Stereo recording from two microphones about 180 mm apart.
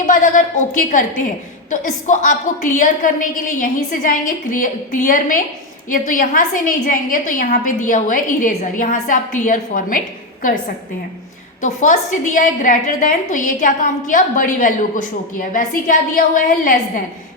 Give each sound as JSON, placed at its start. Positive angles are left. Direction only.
{"t": 0.0, "sound": "a woman's voice", "side_deg": 45}
{"t": 11.6, "sound": "a woman's voice", "side_deg": 45}